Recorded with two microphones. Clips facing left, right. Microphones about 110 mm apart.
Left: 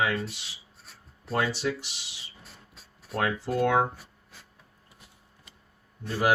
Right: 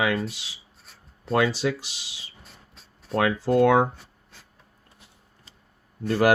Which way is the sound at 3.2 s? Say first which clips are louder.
Right 7 dB; 90° right.